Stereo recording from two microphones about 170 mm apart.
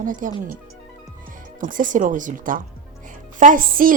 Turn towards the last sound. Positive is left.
turn(degrees=-55)  # may be behind; listen again after turning